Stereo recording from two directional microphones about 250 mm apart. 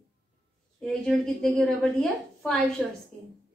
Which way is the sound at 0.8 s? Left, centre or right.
Centre.